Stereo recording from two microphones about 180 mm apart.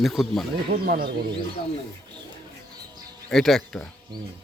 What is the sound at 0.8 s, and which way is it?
Speech, 55° right (ahead or behind).